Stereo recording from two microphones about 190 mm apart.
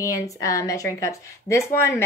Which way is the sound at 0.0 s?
15° left (ahead or behind).